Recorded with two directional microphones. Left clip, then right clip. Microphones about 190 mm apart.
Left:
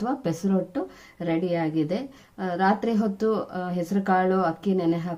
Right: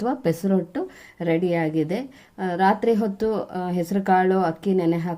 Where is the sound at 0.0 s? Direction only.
35° right (ahead or behind).